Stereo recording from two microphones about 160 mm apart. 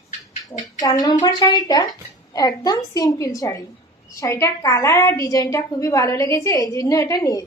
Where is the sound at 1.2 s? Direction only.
25° left (ahead or behind).